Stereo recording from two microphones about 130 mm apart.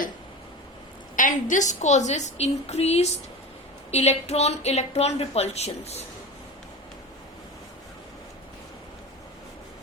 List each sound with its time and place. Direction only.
1.1 s speech: 80° left; by 6.1 s 55° left (ahead or behind)